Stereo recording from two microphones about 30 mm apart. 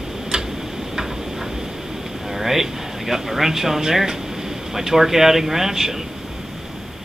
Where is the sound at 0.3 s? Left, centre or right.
Centre.